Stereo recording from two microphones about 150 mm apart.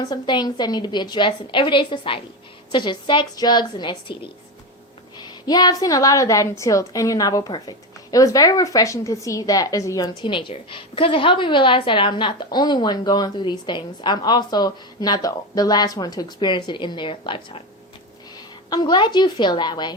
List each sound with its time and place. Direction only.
0.0 s a woman's voice: 30° left (ahead or behind)
18.7 s a woman's voice: 30° left (ahead or behind)